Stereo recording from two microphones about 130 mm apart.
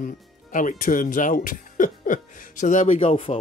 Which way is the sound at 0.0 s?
90° left.